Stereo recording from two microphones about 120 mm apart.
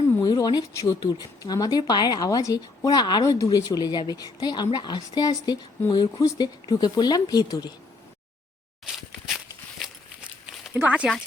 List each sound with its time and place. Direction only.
0.2 s speech: 35° left (ahead or behind)
8.8 s walk: centre (ahead or behind)
10.4 s a sound: 5° right (ahead or behind)